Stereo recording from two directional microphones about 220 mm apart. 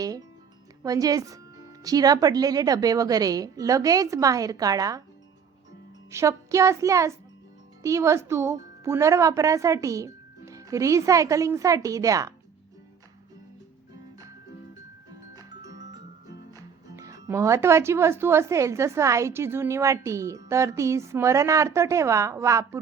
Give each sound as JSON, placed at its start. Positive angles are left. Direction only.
{"t": 0.8, "sound": "speech", "side_deg": -15}
{"t": 6.1, "sound": "speech", "side_deg": -15}
{"t": 15.4, "sound": "music", "side_deg": -15}
{"t": 16.5, "sound": "speech", "side_deg": -15}